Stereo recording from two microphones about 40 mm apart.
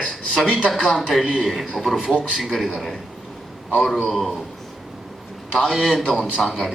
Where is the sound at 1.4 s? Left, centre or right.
Centre.